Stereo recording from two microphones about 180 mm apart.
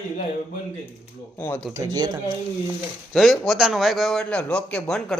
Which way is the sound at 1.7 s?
20° right (ahead or behind).